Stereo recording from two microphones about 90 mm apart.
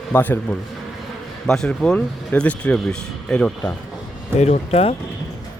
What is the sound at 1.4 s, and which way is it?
Speech, 5° left (ahead or behind).